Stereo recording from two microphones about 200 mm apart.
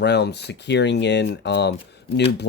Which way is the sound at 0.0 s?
60° left (ahead or behind).